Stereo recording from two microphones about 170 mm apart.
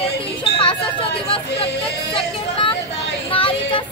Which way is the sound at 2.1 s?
30° left (ahead or behind).